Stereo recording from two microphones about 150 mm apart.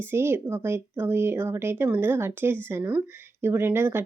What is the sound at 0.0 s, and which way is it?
Speech, 15° right (ahead or behind).